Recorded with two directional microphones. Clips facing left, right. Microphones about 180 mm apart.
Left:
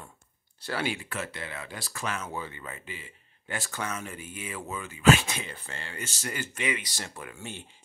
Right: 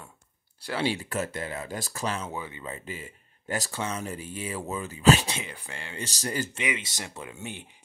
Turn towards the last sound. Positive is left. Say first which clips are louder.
# right 2 dB
turn(degrees=-20)  # may be behind; listen again after turning